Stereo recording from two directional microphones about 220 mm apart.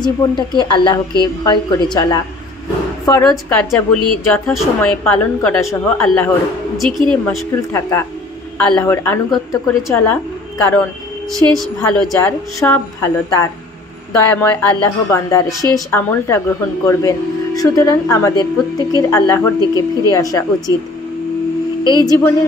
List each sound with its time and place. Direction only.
0.0 s a woman's voice: 20° left (ahead or behind); by 7.4 s 5° left (ahead or behind)
8.5 s a woman's voice: 5° left (ahead or behind)
21.8 s a woman's voice: 15° left (ahead or behind)